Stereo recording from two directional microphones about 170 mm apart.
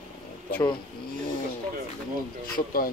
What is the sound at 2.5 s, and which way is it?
Speech, 55° left (ahead or behind).